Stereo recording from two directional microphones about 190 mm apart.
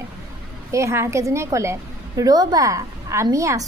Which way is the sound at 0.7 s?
15° right (ahead or behind).